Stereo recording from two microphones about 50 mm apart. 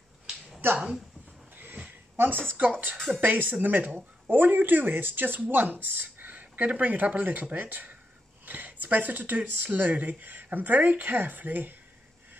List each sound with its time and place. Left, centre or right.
0.7 s a woman's voice: centre
1.8 s a sound: right
3.2 s speech: right